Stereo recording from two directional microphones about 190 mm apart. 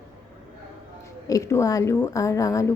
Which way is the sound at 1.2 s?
15° left (ahead or behind).